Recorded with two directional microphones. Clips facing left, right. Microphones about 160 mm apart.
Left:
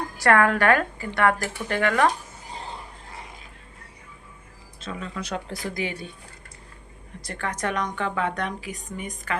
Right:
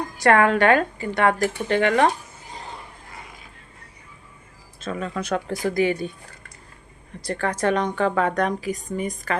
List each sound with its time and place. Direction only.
0.2 s speech: 25° right (ahead or behind)
4.8 s speech: 55° right (ahead or behind)
7.2 s a woman's voice: 35° right (ahead or behind)